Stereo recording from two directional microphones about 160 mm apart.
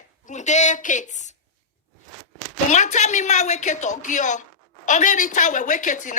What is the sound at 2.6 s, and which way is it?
A woman's voice, 50° left (ahead or behind).